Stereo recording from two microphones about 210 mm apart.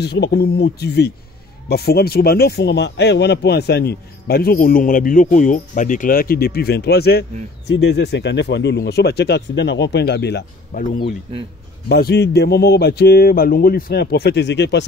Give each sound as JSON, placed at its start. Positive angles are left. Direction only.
{"t": 0.0, "sound": "speech", "side_deg": 50}
{"t": 11.3, "sound": "speech", "side_deg": -25}
{"t": 11.9, "sound": "speech", "side_deg": 50}